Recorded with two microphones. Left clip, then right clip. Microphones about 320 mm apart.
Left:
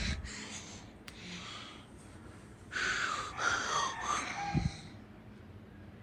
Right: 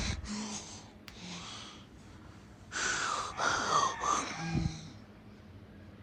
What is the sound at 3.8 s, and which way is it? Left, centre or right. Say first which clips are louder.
Wheeze: right 4 dB; centre.